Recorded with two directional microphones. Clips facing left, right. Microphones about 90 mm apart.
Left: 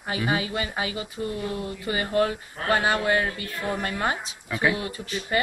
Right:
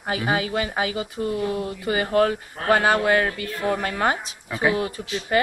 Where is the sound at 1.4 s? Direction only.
15° right (ahead or behind).